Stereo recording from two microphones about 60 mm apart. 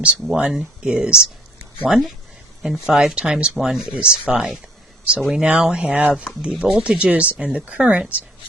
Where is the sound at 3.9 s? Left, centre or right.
Centre.